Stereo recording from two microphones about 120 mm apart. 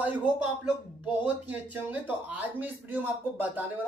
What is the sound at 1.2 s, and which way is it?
Speech, 10° right (ahead or behind).